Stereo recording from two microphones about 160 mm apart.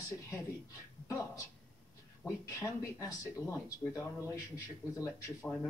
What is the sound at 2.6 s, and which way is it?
Speech, 20° left (ahead or behind).